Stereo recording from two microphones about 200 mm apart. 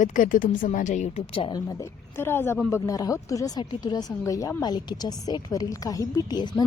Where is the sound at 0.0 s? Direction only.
45° left (ahead or behind); by 1.6 s 25° left (ahead or behind).